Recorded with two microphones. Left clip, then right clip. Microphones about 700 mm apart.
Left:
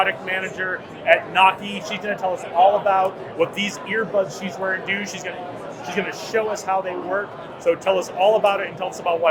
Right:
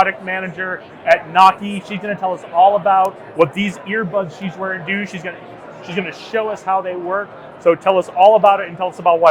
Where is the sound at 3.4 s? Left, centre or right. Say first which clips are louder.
Right 6 dB; right.